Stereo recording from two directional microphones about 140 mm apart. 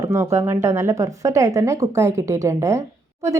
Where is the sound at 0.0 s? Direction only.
20° right (ahead or behind).